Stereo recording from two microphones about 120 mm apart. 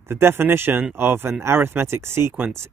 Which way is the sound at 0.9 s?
20° right (ahead or behind).